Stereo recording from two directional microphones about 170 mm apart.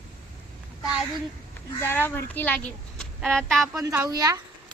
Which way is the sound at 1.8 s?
15° left (ahead or behind).